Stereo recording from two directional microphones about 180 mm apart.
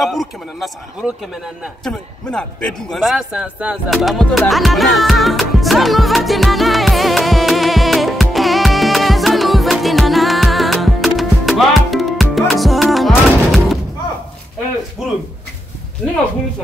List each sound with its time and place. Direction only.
0.0 s a man's voice: centre (ahead or behind)
2.9 s music: centre (ahead or behind)